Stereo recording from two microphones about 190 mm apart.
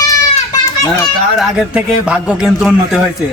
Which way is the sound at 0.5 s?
20° left (ahead or behind).